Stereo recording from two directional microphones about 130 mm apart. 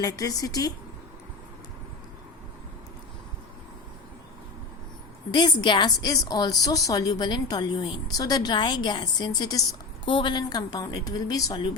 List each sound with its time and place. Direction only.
0.0 s speech: 30° left (ahead or behind)
5.3 s a woman's voice: 35° left (ahead or behind)